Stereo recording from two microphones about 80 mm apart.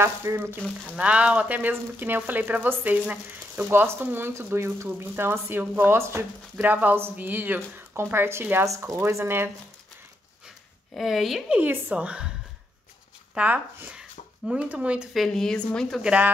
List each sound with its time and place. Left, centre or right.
0.0 s speech: right
0.8 s speech: centre; by 6.2 s right
6.5 s speech: right
11.0 s a woman's voice: centre
11.5 s a woman's voice: right
13.3 s a woman's voice: centre
15.1 s a woman's voice: centre
16.0 s a woman's voice: centre